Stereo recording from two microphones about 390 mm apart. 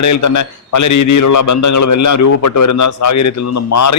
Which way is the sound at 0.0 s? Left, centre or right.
Left.